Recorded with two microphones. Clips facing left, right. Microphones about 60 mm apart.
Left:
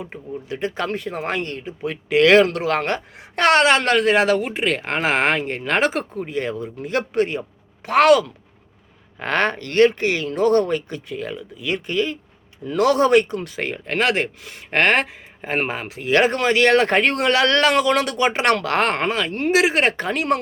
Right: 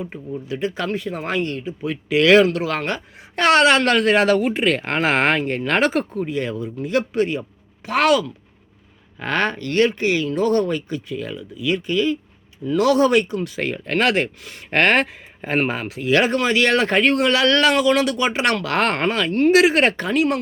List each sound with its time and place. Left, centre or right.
0.4 s speech: left
3.6 s speech: left
6.1 s speech: left
9.2 s speech: left
13.6 s speech: centre
16.0 s speech: left
18.8 s speech: centre
20.0 s speech: left